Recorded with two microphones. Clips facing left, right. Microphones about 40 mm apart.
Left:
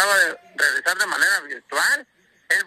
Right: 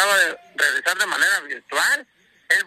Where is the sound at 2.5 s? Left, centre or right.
Right.